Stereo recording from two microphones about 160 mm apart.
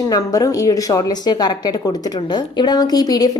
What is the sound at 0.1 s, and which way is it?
Speech, 20° left (ahead or behind).